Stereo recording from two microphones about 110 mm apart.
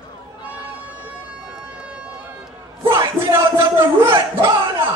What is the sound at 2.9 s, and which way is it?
Music, 25° right (ahead or behind).